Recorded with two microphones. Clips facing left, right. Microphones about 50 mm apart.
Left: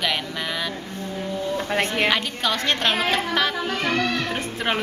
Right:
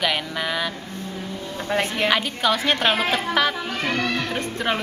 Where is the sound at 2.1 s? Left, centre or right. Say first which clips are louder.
Right 2 dB; centre.